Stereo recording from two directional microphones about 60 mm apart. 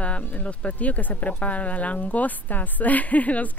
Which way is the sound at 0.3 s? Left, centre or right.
Left.